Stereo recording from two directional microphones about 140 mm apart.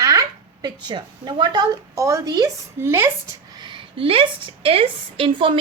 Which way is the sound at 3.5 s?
35° right (ahead or behind).